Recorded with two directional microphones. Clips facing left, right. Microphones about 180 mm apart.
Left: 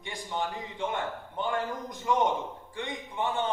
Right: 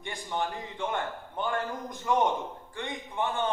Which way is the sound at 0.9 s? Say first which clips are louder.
Even; 50° right (ahead or behind).